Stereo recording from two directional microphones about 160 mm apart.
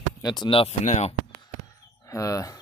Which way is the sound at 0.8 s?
45° left (ahead or behind).